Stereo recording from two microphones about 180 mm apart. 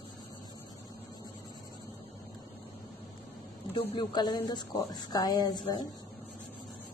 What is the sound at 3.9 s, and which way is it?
Speech, 25° left (ahead or behind).